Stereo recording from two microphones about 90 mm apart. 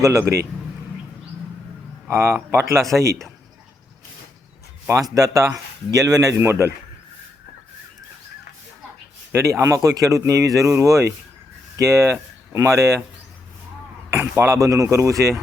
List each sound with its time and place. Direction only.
0.0 s speech: 35° right (ahead or behind)
2.0 s speech: 25° right (ahead or behind)
4.9 s speech: 40° right (ahead or behind)
9.3 s speech: 30° right (ahead or behind)
14.2 s speech: 30° right (ahead or behind)